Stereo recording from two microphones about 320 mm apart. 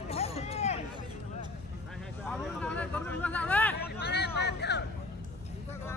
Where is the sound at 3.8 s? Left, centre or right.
Left.